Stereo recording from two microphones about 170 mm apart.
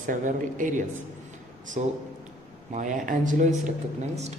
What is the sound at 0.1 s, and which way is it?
Speech, 50° right (ahead or behind).